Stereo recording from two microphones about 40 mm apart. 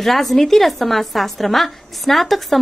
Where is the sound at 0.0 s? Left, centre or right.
Centre.